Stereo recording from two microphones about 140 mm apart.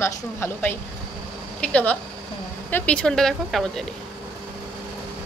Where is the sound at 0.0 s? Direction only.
15° left (ahead or behind).